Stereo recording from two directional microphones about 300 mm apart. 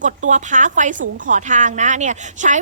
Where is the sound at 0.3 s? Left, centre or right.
Right.